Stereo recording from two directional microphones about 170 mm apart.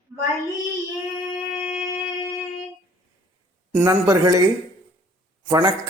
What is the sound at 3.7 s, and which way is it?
Speech, 15° right (ahead or behind).